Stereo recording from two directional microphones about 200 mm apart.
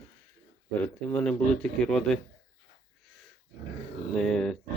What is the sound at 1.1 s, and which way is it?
Speech, 5° left (ahead or behind).